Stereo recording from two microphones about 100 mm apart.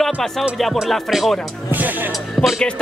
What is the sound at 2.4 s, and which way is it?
Music, 5° right (ahead or behind).